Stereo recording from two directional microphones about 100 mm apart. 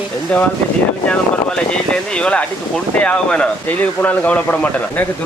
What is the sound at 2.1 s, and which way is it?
Speech, 10° left (ahead or behind).